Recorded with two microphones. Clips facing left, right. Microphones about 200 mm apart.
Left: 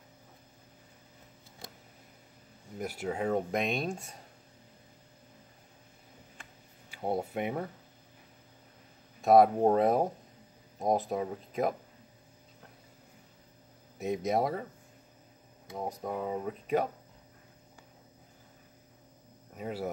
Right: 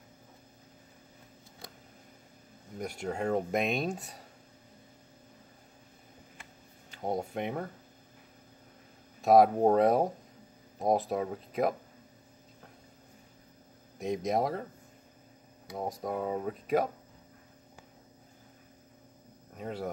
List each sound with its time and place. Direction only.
2.8 s speech: 5° left (ahead or behind)
6.9 s speech: 5° left (ahead or behind)
9.2 s speech: centre (ahead or behind)
13.9 s speech: 5° left (ahead or behind)
16.0 s speech: 10° right (ahead or behind)
16.3 s speech: centre (ahead or behind)
19.5 s speech: 5° left (ahead or behind)